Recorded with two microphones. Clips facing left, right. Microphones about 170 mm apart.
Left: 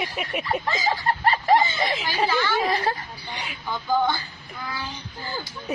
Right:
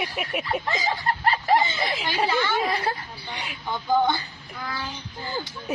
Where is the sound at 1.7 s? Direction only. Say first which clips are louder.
Left 2 dB; centre (ahead or behind).